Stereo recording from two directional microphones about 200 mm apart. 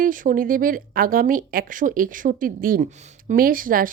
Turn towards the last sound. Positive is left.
turn(degrees=-45)  # may be behind; listen again after turning